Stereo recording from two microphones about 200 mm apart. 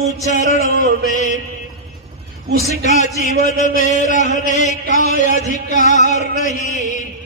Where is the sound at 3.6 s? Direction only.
40° left (ahead or behind).